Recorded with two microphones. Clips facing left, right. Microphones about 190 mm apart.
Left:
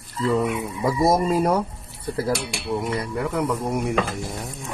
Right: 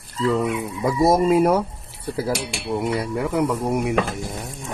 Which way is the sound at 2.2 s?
Centre (ahead or behind).